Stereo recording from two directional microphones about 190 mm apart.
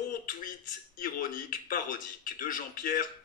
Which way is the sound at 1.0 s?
45° left (ahead or behind).